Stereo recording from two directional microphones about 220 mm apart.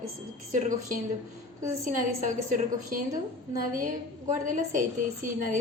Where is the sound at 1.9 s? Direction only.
35° right (ahead or behind).